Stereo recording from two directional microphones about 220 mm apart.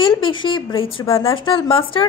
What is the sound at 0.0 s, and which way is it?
A woman's voice, 20° left (ahead or behind).